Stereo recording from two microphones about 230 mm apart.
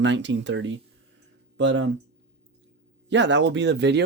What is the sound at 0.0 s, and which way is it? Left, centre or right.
Speech, right.